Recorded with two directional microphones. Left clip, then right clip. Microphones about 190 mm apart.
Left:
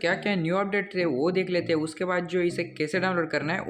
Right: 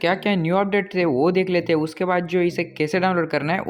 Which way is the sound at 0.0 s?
30° right (ahead or behind).